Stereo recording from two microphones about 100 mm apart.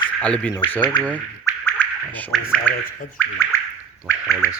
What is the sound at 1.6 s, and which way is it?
Scratching, 15° left (ahead or behind).